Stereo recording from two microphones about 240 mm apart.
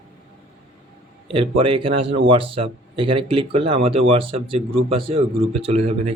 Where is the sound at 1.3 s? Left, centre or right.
Right.